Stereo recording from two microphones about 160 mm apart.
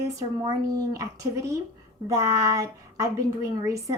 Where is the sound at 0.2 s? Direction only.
20° right (ahead or behind).